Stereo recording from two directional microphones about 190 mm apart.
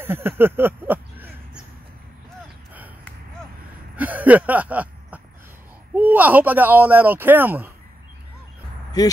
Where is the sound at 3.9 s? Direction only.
10° right (ahead or behind).